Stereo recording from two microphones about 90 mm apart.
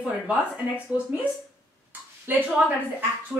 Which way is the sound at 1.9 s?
20° right (ahead or behind).